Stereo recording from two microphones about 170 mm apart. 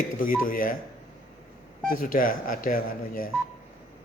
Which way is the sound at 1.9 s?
55° left (ahead or behind).